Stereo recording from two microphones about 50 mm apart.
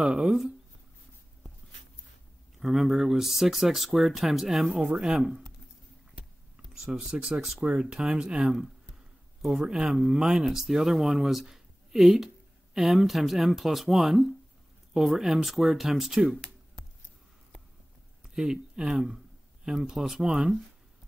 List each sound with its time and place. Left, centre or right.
0.0 s speech: centre
2.6 s speech: centre
6.9 s speech: centre
9.4 s speech: centre
18.3 s speech: centre